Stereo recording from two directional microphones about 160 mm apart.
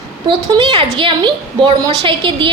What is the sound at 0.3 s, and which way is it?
A woman's voice, 30° right (ahead or behind).